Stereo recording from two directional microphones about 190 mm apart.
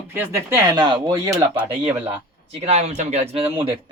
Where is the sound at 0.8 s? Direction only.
25° right (ahead or behind).